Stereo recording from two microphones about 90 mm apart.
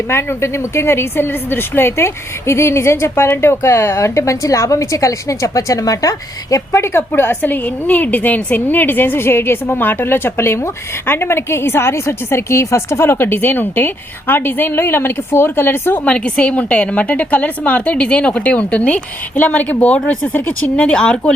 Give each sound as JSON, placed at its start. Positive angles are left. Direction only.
{"t": 0.1, "sound": "a woman's voice", "side_deg": 30}